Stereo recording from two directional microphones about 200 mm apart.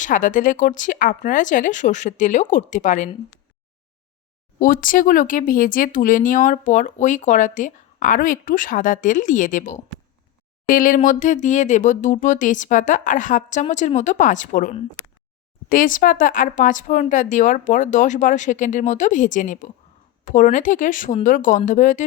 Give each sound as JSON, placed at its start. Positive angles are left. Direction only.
{"t": 0.0, "sound": "speech", "side_deg": 40}
{"t": 4.6, "sound": "speech", "side_deg": 45}